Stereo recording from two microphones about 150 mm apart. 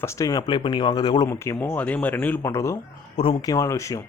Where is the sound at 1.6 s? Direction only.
10° left (ahead or behind).